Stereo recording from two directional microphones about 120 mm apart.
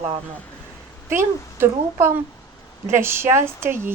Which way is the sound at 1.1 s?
20° right (ahead or behind).